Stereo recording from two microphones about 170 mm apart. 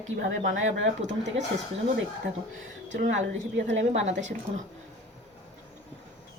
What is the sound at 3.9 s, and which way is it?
Speech, 40° right (ahead or behind).